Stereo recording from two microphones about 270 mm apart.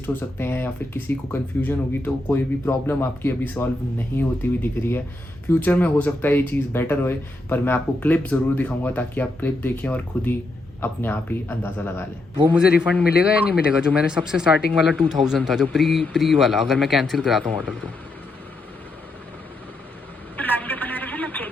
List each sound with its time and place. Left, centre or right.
0.0 s speech: centre
12.5 s speech: centre
20.3 s a sound: centre